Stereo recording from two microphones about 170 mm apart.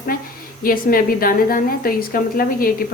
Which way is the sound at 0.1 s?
60° left (ahead or behind).